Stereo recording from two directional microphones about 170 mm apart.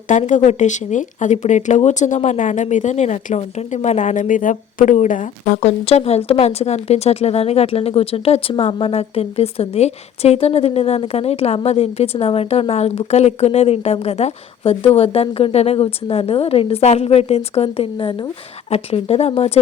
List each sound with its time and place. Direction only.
0.1 s speech: 45° left (ahead or behind)